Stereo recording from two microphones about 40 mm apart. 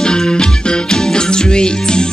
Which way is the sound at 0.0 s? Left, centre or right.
Left.